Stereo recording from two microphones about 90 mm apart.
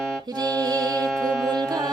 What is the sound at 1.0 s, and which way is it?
Music, 10° left (ahead or behind).